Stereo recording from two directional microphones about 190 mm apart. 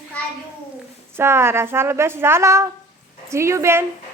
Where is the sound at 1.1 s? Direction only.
15° right (ahead or behind).